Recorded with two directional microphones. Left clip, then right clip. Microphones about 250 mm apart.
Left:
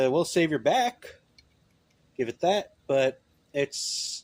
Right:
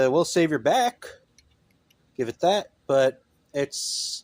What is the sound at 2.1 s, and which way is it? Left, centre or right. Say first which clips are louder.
Speech: right 3 dB; right.